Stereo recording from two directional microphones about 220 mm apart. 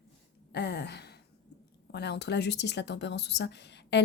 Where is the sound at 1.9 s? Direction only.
50° left (ahead or behind).